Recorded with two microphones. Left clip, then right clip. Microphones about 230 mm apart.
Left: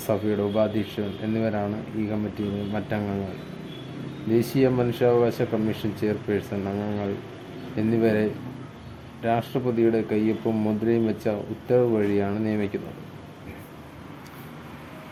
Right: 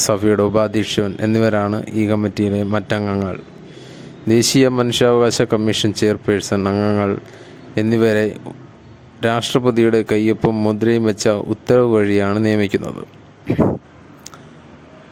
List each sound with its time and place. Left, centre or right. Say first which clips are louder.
0.1 s speech: right 8 dB; right
4.3 s speech: right 8 dB; right